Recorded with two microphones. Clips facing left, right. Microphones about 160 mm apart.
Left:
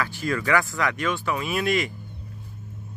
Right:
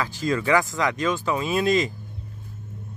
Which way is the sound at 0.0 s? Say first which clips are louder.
Right 2 dB; 20° right (ahead or behind).